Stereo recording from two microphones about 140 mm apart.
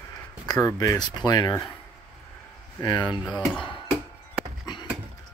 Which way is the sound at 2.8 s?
30° left (ahead or behind).